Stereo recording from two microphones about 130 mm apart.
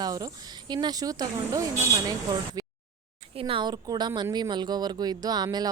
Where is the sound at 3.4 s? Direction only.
40° right (ahead or behind).